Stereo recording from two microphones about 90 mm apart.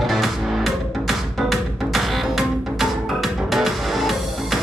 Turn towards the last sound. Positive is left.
turn(degrees=0)  # may be behind; listen again after turning